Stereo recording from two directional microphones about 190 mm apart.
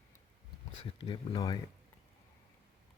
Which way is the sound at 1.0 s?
25° left (ahead or behind).